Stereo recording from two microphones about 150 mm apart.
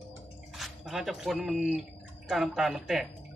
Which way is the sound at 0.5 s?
Centre (ahead or behind).